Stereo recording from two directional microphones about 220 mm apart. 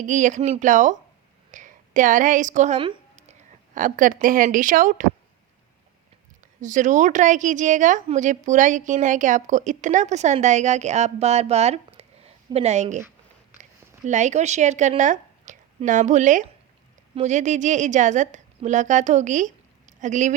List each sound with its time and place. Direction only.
0.0 s a woman's voice: 35° right (ahead or behind)
1.5 s a sound: 35° right (ahead or behind)
3.8 s a woman's voice: 35° right (ahead or behind)
6.6 s a woman's voice: 35° right (ahead or behind)